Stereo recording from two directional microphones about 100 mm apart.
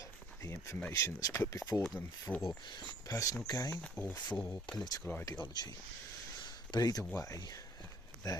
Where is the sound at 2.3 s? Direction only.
15° left (ahead or behind).